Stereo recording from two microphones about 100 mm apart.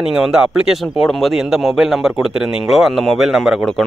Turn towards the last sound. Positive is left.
turn(degrees=0)  # may be behind; listen again after turning